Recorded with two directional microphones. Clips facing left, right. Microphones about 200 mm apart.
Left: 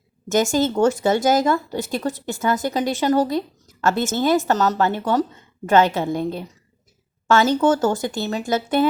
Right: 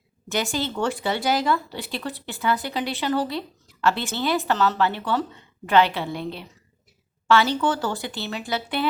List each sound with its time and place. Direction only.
0.3 s speech: 45° left (ahead or behind)